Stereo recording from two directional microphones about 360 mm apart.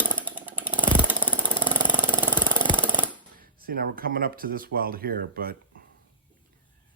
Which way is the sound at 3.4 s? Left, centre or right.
Right.